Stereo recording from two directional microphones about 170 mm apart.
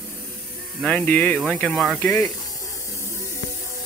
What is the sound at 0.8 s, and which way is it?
Speech, 5° left (ahead or behind).